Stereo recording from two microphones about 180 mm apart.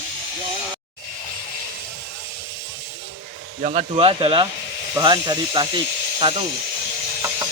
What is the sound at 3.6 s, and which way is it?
Speech, 40° right (ahead or behind).